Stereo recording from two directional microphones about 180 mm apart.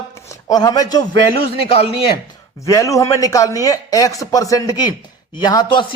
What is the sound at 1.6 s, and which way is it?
Speech, 35° left (ahead or behind).